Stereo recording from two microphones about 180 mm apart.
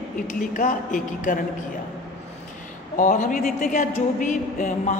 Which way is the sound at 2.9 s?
45° left (ahead or behind).